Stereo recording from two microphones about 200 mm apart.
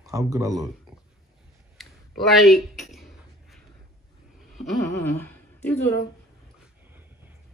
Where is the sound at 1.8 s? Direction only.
Centre (ahead or behind).